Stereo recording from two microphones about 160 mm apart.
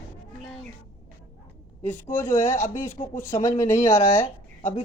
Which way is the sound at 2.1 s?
15° left (ahead or behind).